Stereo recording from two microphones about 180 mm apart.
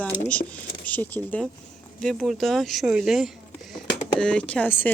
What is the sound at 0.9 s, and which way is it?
Speech, 10° left (ahead or behind).